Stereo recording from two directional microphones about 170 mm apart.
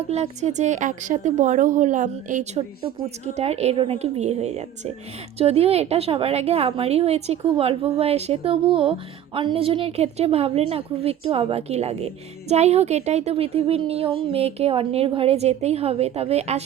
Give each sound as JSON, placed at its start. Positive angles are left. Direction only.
{"t": 0.1, "sound": "a woman's voice", "side_deg": -40}